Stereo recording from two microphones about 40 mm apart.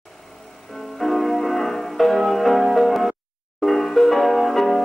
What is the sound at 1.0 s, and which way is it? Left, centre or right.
Music, centre.